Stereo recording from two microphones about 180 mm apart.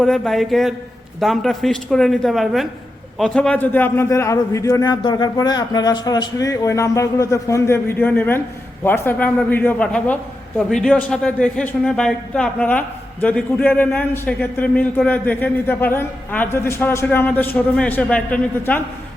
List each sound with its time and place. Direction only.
0.0 s a man's voice: centre (ahead or behind)